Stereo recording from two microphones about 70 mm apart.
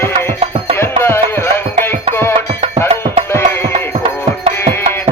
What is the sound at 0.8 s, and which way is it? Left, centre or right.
Music, left.